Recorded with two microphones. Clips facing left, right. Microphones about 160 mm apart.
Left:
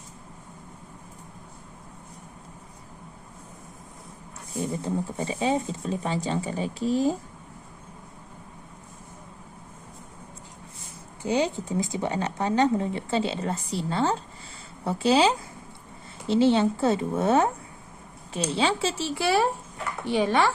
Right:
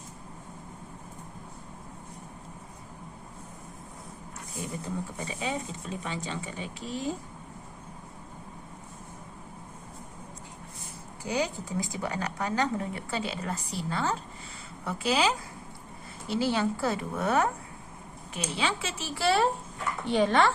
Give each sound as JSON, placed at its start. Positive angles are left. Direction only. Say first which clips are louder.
{"t": 4.8, "sound": "speech", "louder": "left 6 dB", "side_deg": 30}
{"t": 11.2, "sound": "speech", "louder": "left 5 dB", "side_deg": 25}
{"t": 18.5, "sound": "speech", "louder": "left 6 dB", "side_deg": 30}
{"t": 19.1, "sound": "speech", "louder": "even", "side_deg": 15}